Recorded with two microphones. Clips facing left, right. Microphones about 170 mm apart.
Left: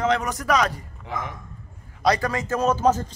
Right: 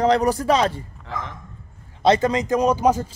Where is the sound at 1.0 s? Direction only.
15° left (ahead or behind).